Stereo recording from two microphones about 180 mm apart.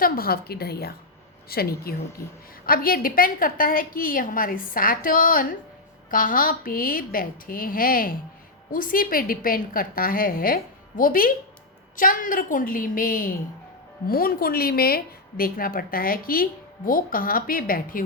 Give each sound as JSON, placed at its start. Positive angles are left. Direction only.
{"t": 0.0, "sound": "a woman's voice", "side_deg": 55}